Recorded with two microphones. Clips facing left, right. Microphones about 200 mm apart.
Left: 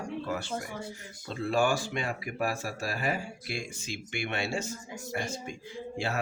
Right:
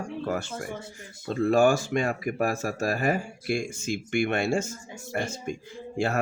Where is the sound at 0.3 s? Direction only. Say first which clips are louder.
Right 8 dB; 45° right (ahead or behind).